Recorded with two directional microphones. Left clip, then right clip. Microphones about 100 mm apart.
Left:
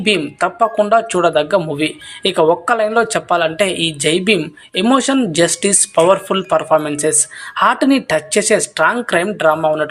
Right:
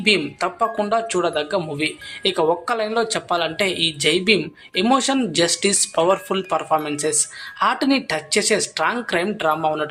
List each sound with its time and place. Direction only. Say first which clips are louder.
0.0 s speech: left 3 dB; 30° left (ahead or behind)